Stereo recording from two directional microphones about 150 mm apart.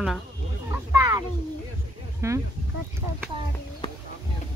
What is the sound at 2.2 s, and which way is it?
Speech, 20° right (ahead or behind).